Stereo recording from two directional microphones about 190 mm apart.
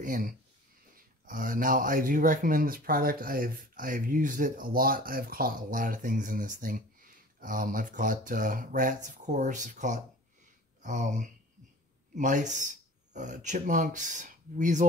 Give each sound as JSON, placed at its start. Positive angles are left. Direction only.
{"t": 0.0, "sound": "speech", "side_deg": -45}